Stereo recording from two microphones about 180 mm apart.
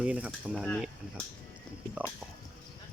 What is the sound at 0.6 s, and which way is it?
Speech, 5° left (ahead or behind).